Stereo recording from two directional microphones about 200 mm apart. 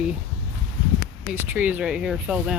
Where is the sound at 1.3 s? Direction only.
10° right (ahead or behind).